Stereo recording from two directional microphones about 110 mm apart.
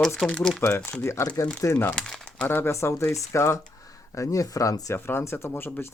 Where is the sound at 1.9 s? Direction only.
5° left (ahead or behind).